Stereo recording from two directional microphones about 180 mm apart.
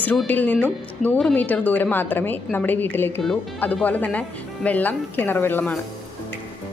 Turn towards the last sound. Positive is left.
turn(degrees=10)  # may be behind; listen again after turning